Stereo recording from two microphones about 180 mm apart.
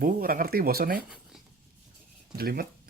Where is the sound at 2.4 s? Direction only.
55° right (ahead or behind).